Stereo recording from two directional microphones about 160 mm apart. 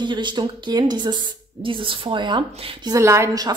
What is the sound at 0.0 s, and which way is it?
Speech, 30° right (ahead or behind).